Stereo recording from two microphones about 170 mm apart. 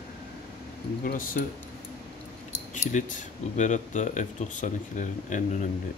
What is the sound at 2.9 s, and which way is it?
Speech, 45° left (ahead or behind).